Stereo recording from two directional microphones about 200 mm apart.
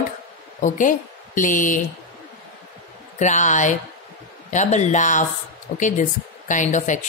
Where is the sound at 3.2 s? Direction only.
40° left (ahead or behind).